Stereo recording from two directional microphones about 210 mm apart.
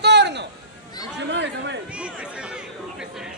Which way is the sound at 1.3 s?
55° right (ahead or behind).